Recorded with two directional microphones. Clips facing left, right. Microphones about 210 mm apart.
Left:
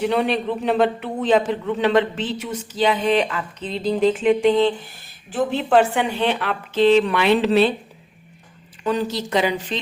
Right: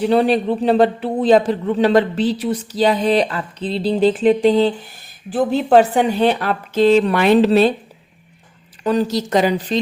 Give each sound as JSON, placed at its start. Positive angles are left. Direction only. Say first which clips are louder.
{"t": 0.0, "sound": "a man's voice", "louder": "right 5 dB", "side_deg": -35}
{"t": 8.8, "sound": "a man's voice", "louder": "right 5 dB", "side_deg": -40}